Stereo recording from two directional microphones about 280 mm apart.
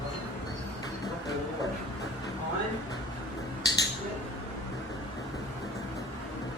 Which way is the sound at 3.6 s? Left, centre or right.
Centre.